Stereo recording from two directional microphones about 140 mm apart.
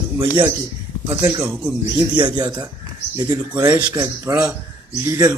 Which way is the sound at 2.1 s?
30° right (ahead or behind).